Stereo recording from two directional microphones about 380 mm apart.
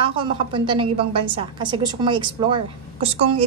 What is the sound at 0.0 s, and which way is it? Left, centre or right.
A woman's voice, centre.